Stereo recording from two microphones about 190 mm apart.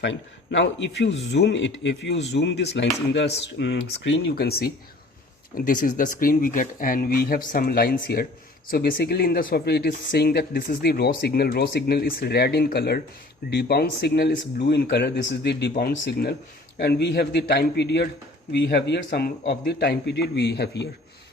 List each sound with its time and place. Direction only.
0.0 s speech: 70° left (ahead or behind)